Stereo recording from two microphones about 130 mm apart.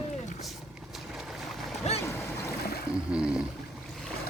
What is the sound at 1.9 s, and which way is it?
Boat, 55° left (ahead or behind).